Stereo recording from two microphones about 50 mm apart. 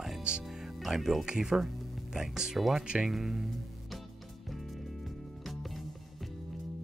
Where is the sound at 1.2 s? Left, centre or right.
Centre.